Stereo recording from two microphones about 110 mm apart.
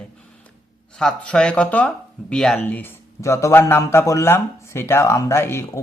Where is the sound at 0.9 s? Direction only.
10° left (ahead or behind).